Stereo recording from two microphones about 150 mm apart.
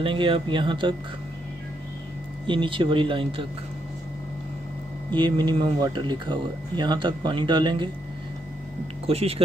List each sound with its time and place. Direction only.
0.0 s speech: 35° right (ahead or behind)
2.4 s speech: 35° right (ahead or behind)
5.1 s speech: 30° right (ahead or behind)
9.0 s speech: 40° right (ahead or behind)